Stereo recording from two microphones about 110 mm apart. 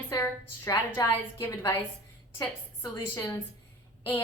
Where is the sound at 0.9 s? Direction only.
20° left (ahead or behind).